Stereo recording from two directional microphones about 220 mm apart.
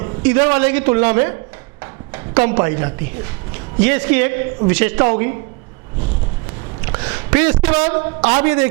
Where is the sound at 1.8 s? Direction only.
20° right (ahead or behind).